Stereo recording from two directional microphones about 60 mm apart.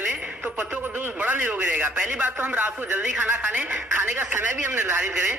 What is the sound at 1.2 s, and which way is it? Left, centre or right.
A man's voice, right.